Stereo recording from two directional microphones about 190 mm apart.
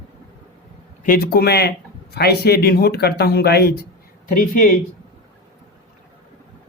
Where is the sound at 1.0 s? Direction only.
50° left (ahead or behind).